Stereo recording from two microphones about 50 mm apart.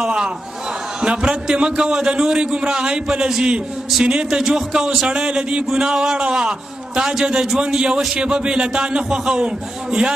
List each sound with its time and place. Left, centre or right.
1.0 s a man's voice: right